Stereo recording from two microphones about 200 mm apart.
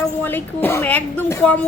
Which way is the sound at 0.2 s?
10° left (ahead or behind).